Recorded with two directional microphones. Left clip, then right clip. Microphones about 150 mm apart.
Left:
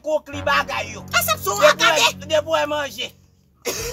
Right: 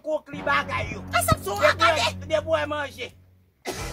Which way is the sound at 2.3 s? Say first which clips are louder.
Left 5 dB; 15° left (ahead or behind).